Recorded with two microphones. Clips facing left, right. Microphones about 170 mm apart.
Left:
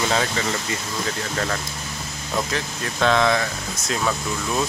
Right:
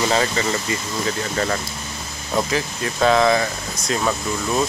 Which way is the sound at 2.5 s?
5° right (ahead or behind).